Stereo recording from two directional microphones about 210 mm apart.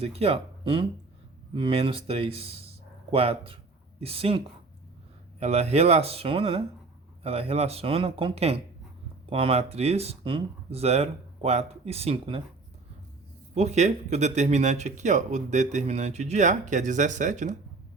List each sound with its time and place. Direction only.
0.0 s speech: 30° right (ahead or behind)
5.4 s speech: 30° right (ahead or behind)
13.5 s speech: 30° right (ahead or behind)